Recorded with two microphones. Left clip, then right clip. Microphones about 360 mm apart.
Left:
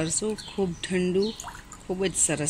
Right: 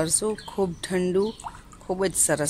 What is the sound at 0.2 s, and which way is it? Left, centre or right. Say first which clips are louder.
Speech: right 3 dB; right.